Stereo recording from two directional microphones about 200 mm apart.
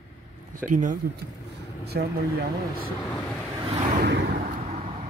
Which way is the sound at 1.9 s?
55° right (ahead or behind).